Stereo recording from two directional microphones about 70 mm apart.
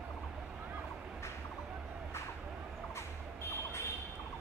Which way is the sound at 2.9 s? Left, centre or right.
Left.